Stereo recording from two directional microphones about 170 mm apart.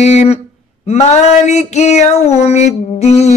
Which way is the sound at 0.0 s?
40° left (ahead or behind).